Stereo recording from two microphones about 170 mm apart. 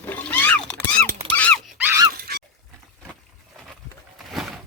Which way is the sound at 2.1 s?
65° right (ahead or behind).